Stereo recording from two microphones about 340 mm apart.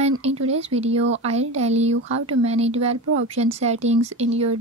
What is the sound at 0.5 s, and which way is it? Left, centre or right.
Speech, centre.